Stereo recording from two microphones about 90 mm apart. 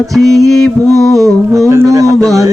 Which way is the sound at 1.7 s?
35° right (ahead or behind).